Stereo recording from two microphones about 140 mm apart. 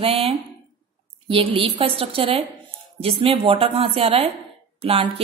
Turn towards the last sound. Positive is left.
turn(degrees=-45)  # may be behind; listen again after turning